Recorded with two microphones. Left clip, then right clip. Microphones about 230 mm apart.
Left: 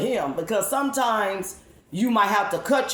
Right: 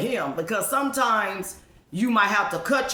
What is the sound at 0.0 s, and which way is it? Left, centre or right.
A man's voice, centre.